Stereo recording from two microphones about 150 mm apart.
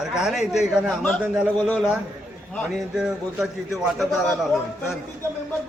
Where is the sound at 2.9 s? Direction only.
5° right (ahead or behind).